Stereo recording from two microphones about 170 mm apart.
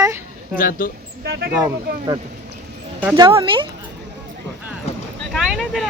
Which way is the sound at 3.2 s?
30° right (ahead or behind).